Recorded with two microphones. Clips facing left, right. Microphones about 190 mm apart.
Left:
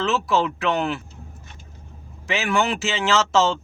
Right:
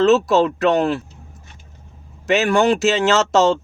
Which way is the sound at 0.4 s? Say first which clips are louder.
Right 6 dB; 35° right (ahead or behind).